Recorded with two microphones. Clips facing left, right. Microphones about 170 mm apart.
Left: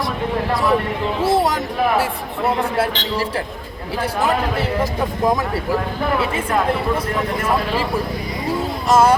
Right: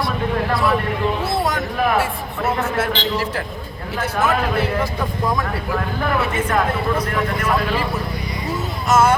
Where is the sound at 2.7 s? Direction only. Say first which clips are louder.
Left 1 dB; 35° left (ahead or behind).